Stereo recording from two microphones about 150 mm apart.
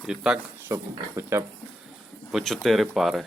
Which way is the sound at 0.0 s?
5° right (ahead or behind).